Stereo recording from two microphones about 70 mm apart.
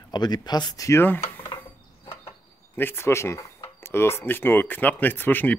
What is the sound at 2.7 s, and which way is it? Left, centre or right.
Speech, left.